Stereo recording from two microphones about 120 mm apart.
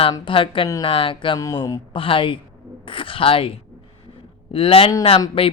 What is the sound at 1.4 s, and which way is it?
Speech, 30° left (ahead or behind).